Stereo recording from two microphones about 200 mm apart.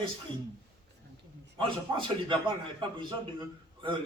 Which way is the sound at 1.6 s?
25° right (ahead or behind).